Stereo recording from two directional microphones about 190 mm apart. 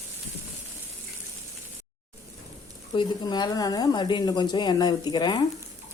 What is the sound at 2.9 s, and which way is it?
Speech, 20° left (ahead or behind).